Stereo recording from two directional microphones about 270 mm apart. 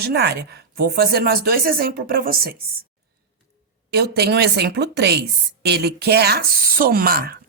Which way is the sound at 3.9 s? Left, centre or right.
Right.